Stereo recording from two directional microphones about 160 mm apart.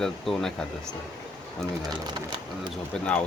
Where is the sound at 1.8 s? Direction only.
25° right (ahead or behind).